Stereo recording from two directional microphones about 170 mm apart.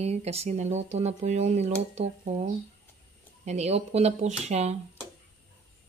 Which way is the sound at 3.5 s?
40° right (ahead or behind).